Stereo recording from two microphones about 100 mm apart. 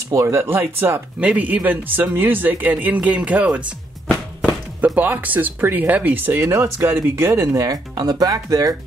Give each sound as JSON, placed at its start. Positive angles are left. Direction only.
{"t": 0.1, "sound": "speech", "side_deg": -30}
{"t": 4.9, "sound": "speech", "side_deg": -20}